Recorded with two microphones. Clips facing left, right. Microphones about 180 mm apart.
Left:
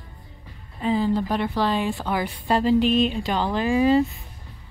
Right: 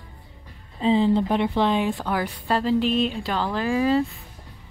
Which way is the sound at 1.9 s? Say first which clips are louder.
Even; 10° left (ahead or behind).